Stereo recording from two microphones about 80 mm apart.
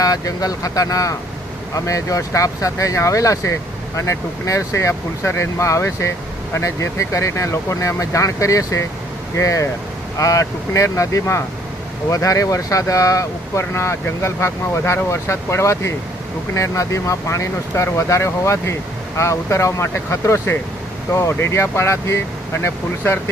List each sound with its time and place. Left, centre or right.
0.0 s speech: left